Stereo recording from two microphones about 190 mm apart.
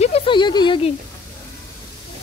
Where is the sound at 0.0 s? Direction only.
30° left (ahead or behind).